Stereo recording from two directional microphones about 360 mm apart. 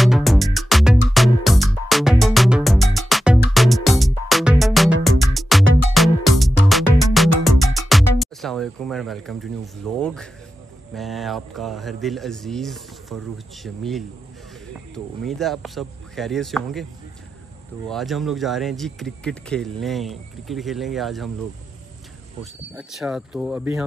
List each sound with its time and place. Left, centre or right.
0.0 s music: centre
8.2 s a sound: centre
11.0 s speech: centre
15.2 s speech: centre
17.8 s speech: centre
22.4 s speech: centre